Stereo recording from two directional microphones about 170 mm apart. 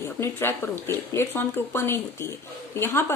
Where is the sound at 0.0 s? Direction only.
15° left (ahead or behind).